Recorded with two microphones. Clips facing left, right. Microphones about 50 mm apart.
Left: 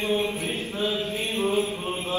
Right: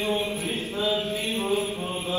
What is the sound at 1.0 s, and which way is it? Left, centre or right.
Mantra, left.